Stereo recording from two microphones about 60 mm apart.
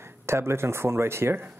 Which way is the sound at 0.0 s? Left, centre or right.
Right.